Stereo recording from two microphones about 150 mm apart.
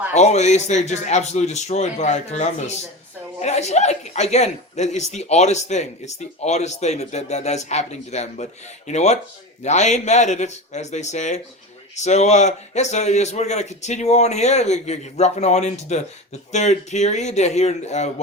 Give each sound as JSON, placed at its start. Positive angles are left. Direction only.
{"t": 0.1, "sound": "speech", "side_deg": 50}